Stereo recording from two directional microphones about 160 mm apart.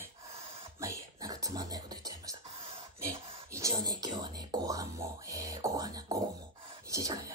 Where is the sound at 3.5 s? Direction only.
20° right (ahead or behind).